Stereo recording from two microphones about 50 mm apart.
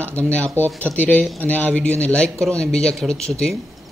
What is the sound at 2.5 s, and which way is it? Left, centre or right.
Speech, centre.